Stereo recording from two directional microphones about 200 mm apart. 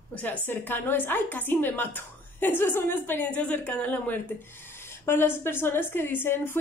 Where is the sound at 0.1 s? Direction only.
5° left (ahead or behind).